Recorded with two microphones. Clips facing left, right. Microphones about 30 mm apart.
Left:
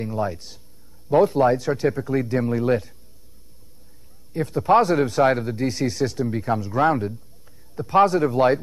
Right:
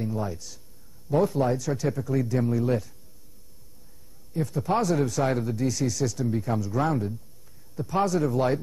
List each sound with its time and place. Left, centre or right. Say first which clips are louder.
0.0 s a man's voice: left 5 dB; left
4.3 s a man's voice: left 8 dB; left